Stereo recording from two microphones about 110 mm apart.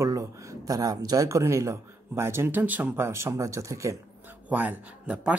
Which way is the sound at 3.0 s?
25° right (ahead or behind).